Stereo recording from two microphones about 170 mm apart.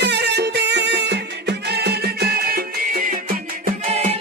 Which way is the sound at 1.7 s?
70° right (ahead or behind).